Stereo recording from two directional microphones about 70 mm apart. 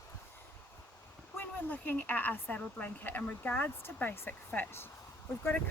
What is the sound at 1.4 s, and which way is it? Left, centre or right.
A woman's voice, left.